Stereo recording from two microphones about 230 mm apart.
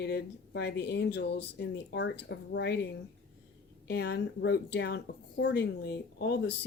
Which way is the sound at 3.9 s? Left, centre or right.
Left.